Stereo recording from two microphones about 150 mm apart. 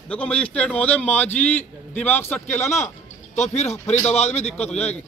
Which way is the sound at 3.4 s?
45° left (ahead or behind).